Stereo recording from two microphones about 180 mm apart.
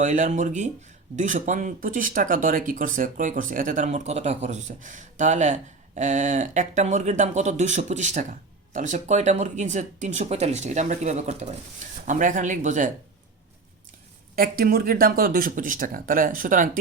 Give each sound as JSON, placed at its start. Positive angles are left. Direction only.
{"t": 0.0, "sound": "speech", "side_deg": -45}
{"t": 14.3, "sound": "speech", "side_deg": -55}